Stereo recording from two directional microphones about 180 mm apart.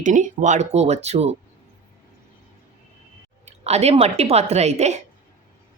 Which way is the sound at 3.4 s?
35° right (ahead or behind).